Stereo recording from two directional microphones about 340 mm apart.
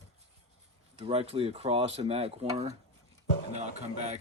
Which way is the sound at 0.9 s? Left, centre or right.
Centre.